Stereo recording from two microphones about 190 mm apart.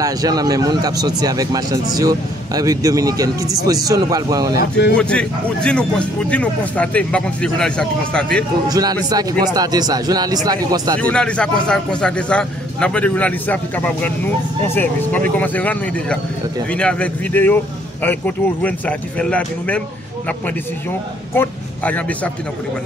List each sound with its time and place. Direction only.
0.0 s speech: 20° right (ahead or behind)
4.6 s speech: 60° left (ahead or behind)
4.9 s speech: 5° left (ahead or behind)
8.6 s speech: 20° right (ahead or behind)
11.0 s speech: 5° left (ahead or behind)
15.3 s speech: 10° left (ahead or behind)
21.3 s a man's voice: 10° left (ahead or behind)